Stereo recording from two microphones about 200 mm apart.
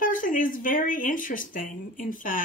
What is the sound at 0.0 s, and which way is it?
Speech, 45° left (ahead or behind).